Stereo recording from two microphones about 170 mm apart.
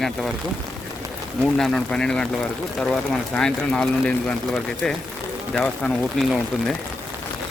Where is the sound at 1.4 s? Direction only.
Centre (ahead or behind).